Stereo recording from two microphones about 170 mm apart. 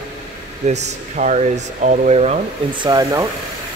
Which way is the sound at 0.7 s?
45° right (ahead or behind).